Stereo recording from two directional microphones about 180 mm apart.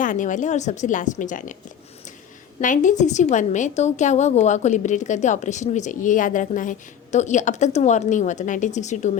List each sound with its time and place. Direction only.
0.0 s speech: 45° left (ahead or behind)
2.6 s a woman's voice: 45° left (ahead or behind)